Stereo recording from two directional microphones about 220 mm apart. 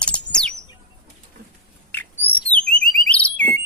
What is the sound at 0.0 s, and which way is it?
Chirp, 5° left (ahead or behind).